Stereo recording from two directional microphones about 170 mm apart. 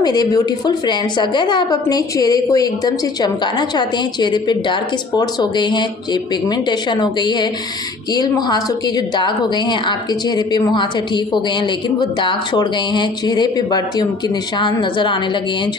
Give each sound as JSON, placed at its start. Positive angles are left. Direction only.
{"t": 0.0, "sound": "a woman's voice", "side_deg": 25}